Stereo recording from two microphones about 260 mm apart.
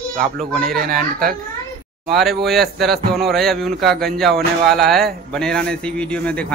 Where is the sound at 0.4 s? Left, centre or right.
Centre.